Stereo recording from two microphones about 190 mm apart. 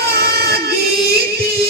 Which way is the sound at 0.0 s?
55° right (ahead or behind).